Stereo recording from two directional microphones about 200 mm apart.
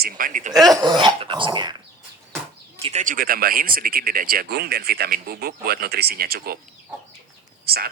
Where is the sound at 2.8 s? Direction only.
35° right (ahead or behind).